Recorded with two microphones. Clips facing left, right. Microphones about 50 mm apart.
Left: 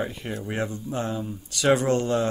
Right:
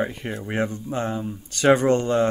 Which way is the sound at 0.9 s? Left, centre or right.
Right.